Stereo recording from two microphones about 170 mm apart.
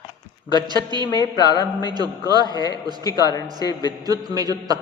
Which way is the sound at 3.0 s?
20° left (ahead or behind).